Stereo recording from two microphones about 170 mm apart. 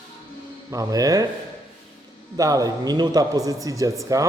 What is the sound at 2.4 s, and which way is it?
A man's voice, 20° right (ahead or behind).